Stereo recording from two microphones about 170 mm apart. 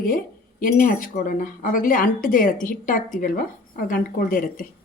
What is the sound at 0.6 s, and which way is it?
Speech, 55° left (ahead or behind).